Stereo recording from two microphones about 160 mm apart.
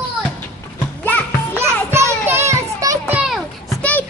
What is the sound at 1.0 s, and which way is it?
Music, 10° left (ahead or behind).